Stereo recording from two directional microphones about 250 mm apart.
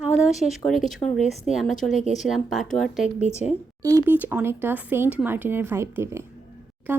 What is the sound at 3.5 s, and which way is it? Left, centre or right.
Speech, centre.